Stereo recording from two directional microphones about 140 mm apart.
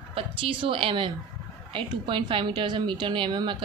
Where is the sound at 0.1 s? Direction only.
40° right (ahead or behind).